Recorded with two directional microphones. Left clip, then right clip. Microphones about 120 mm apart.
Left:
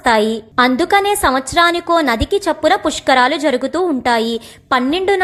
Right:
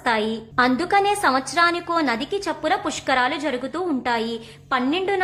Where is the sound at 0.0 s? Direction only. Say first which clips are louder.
Left 8 dB; 45° left (ahead or behind).